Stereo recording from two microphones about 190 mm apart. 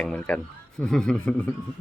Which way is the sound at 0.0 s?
5° left (ahead or behind).